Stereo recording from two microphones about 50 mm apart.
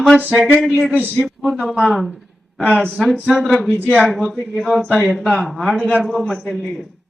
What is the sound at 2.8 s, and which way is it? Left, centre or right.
Speech, centre.